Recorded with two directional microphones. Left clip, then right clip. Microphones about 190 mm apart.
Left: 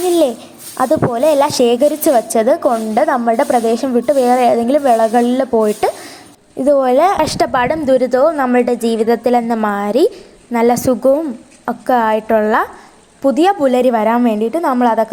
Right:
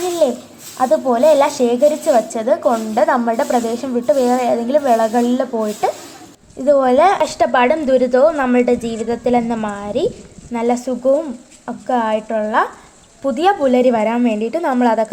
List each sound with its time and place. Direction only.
0.8 s a woman's voice: 30° left (ahead or behind); by 15.0 s 5° left (ahead or behind)